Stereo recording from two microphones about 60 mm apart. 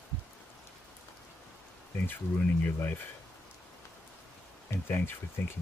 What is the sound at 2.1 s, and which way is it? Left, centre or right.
Speech, left.